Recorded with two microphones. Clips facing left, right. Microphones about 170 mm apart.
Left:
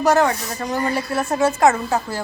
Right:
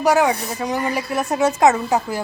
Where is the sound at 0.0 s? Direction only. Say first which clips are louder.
Even; 10° right (ahead or behind).